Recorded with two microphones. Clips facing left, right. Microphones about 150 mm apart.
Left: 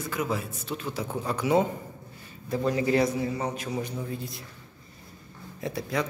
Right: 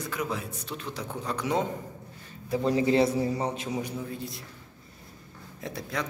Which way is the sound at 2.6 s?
25° right (ahead or behind).